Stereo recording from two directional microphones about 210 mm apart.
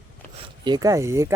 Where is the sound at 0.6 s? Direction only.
20° right (ahead or behind).